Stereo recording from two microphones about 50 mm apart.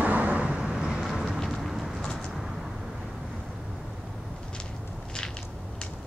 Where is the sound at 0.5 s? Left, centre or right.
Centre.